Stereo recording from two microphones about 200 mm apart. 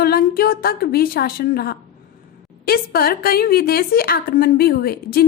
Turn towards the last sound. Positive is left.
turn(degrees=50)  # may be behind; listen again after turning